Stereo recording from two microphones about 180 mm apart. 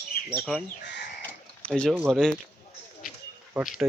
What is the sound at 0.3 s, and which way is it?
Speech, centre (ahead or behind).